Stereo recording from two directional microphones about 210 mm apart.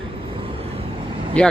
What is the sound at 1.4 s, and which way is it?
Speech, 5° left (ahead or behind).